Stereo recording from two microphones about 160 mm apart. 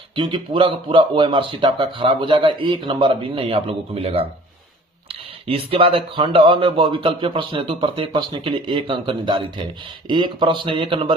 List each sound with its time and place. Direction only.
0.2 s speech: 30° right (ahead or behind)